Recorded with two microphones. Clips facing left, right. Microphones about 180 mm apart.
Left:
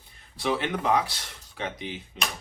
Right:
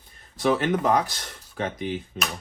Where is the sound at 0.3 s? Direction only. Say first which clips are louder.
Right 5 dB; 45° right (ahead or behind).